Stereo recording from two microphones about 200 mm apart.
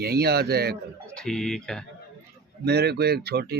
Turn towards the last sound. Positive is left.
turn(degrees=-55)  # may be behind; listen again after turning